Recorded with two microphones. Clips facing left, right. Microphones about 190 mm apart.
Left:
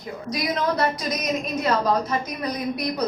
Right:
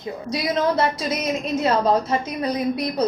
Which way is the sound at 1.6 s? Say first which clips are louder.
Right 3 dB; 25° right (ahead or behind).